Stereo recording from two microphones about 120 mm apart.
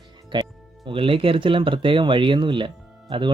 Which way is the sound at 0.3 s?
40° right (ahead or behind).